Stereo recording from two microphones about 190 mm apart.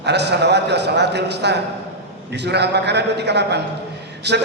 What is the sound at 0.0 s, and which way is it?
A man's voice, 65° right (ahead or behind).